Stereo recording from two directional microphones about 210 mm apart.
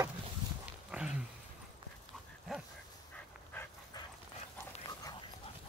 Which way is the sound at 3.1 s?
10° left (ahead or behind).